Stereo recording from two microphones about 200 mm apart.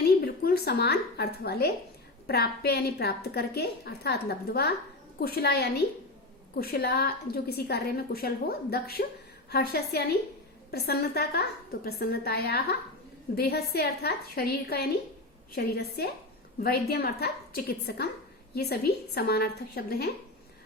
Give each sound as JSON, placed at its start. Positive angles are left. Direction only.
{"t": 0.2, "sound": "a woman's voice", "side_deg": 50}